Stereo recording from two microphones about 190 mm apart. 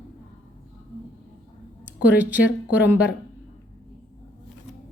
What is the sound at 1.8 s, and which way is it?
Speech, 10° right (ahead or behind).